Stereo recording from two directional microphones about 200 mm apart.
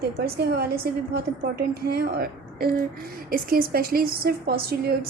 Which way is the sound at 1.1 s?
50° right (ahead or behind).